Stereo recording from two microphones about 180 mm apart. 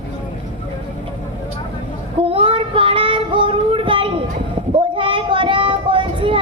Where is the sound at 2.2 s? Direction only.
30° right (ahead or behind).